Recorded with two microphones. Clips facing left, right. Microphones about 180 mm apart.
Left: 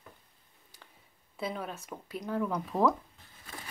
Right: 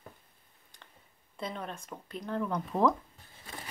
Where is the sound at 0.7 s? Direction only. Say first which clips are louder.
Even; 5° left (ahead or behind).